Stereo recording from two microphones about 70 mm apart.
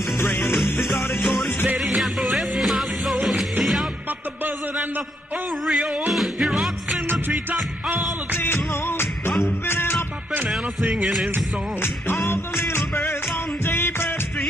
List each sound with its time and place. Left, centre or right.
0.4 s music: centre
5.7 s music: centre
8.3 s music: left
10.5 s music: centre
13.7 s music: left